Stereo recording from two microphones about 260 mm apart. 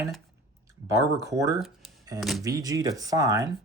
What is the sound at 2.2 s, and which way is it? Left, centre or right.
Speech, centre.